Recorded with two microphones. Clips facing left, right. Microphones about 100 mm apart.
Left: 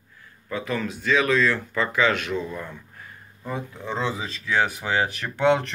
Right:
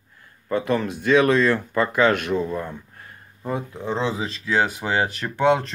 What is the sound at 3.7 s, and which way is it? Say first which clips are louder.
Speech: right 2 dB; 35° right (ahead or behind).